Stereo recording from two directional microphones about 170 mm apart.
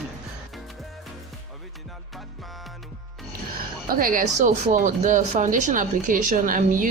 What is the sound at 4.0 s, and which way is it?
Speech, 55° right (ahead or behind).